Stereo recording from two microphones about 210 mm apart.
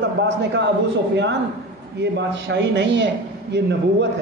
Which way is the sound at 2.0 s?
60° right (ahead or behind).